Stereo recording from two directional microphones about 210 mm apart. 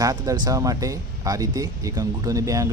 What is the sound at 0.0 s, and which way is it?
Speech, 15° right (ahead or behind).